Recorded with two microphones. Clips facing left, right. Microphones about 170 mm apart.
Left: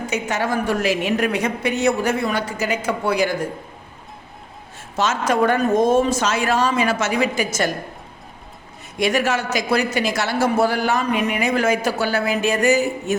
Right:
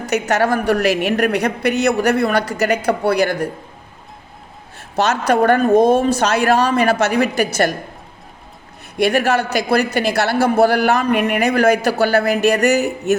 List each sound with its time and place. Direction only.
0.0 s a woman's voice: 70° right (ahead or behind)
4.9 s a man's voice: 65° right (ahead or behind)
9.0 s a man's voice: 60° right (ahead or behind)